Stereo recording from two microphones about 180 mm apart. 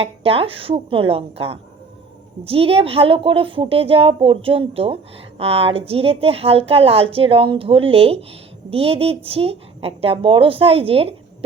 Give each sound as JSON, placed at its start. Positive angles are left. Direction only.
{"t": 0.0, "sound": "a woman's voice", "side_deg": -30}